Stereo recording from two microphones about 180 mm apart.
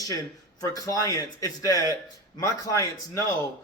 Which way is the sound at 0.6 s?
20° left (ahead or behind).